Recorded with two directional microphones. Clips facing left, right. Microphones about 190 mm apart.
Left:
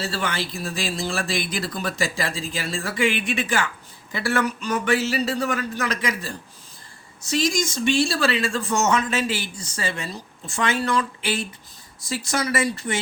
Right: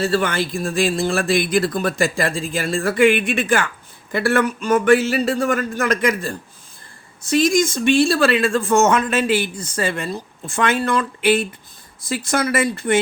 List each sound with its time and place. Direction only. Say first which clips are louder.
0.0 s a man's voice: right 8 dB; 50° right (ahead or behind)